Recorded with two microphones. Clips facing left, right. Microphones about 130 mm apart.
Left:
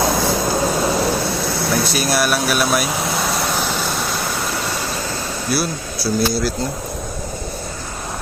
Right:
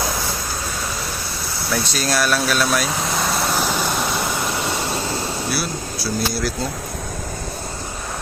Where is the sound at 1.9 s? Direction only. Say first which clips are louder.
Left 2 dB; 10° left (ahead or behind).